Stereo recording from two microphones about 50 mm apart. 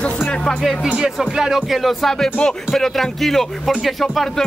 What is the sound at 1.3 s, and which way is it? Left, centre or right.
Speech, centre.